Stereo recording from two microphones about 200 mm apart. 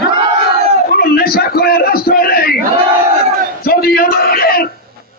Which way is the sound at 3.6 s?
50° left (ahead or behind).